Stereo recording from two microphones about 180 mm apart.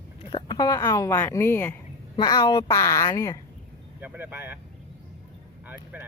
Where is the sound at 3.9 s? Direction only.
10° right (ahead or behind).